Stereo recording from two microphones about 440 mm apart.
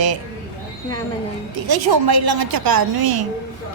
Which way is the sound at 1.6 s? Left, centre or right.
Right.